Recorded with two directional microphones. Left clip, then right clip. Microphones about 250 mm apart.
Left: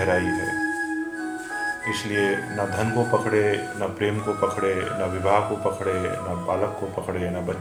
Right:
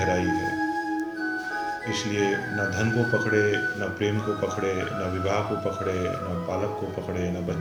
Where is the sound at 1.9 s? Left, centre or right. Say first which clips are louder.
Left 3 dB; left.